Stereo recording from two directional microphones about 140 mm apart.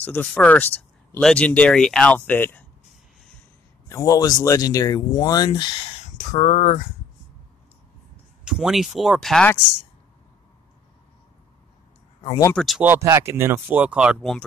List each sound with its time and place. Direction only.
0.0 s speech: 10° left (ahead or behind)
3.9 s speech: 25° left (ahead or behind)
6.0 s speech: 60° left (ahead or behind)
8.5 s speech: 5° right (ahead or behind)
12.5 s speech: centre (ahead or behind)
12.8 s speech: 20° right (ahead or behind)